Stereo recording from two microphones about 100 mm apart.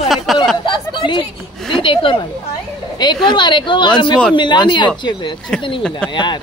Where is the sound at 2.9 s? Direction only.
45° left (ahead or behind).